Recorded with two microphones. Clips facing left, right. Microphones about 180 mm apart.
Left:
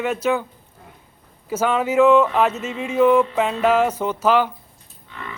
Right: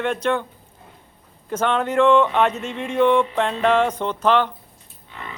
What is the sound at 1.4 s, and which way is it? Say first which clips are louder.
Speech: left 1 dB; 5° left (ahead or behind).